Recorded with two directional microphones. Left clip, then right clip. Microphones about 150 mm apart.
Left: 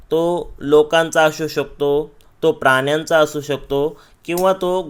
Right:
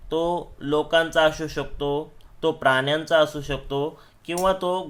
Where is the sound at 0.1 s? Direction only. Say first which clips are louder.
Left 6 dB; 45° left (ahead or behind).